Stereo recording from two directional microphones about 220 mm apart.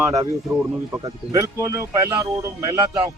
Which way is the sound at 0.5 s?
10° right (ahead or behind).